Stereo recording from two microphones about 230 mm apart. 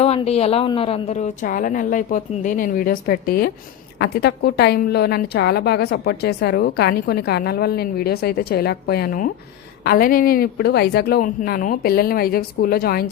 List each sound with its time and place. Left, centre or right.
0.0 s a woman's voice: left